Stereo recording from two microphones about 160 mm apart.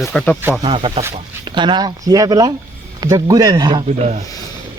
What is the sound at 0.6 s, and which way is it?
Speech, 35° right (ahead or behind).